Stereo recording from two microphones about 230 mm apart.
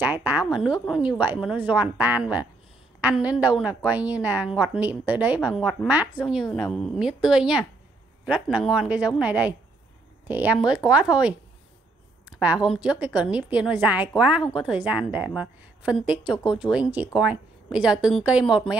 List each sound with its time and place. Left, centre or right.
0.0 s a woman's voice: centre
12.6 s a woman's voice: centre